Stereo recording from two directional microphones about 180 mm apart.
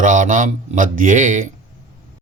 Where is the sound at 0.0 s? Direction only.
45° right (ahead or behind).